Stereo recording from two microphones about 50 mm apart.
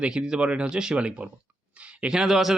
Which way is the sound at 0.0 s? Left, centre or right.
Centre.